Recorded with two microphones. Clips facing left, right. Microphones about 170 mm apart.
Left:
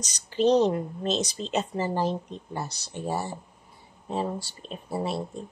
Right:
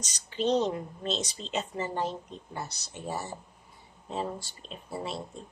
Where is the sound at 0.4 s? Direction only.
40° left (ahead or behind).